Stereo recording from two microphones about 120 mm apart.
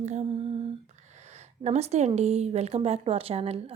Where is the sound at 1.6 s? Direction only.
65° right (ahead or behind).